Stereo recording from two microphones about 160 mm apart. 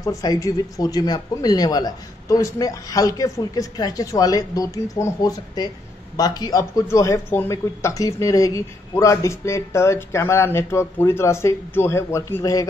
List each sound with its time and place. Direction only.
0.2 s speech: 25° left (ahead or behind)